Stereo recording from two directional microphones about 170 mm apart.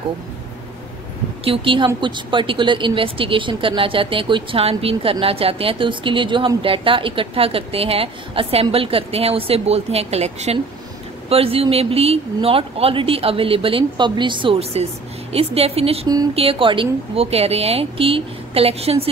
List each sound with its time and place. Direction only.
1.4 s speech: 30° right (ahead or behind)